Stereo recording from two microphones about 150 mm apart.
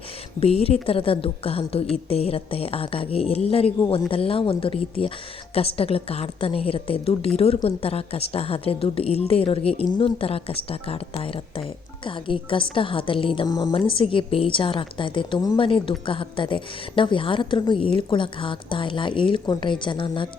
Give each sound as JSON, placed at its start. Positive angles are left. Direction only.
{"t": 0.3, "sound": "a woman's voice", "side_deg": 40}
{"t": 13.7, "sound": "a woman's voice", "side_deg": 35}